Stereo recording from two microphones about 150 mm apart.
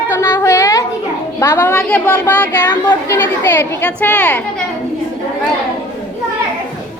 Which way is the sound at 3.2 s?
15° left (ahead or behind).